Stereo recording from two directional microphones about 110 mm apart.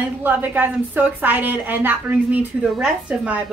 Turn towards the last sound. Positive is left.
turn(degrees=-15)  # may be behind; listen again after turning